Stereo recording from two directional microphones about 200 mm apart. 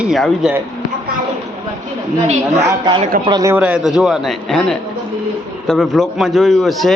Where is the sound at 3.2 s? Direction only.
15° right (ahead or behind).